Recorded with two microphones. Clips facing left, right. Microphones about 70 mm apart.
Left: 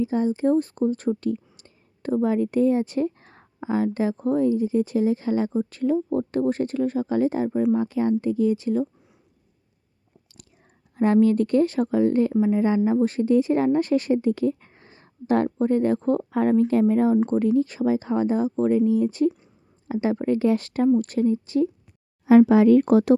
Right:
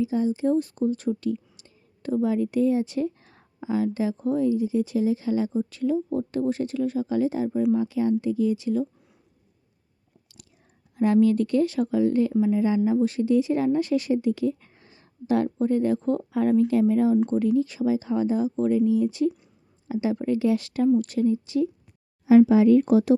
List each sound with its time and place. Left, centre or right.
0.0 s speech: left
10.9 s speech: left
22.3 s speech: left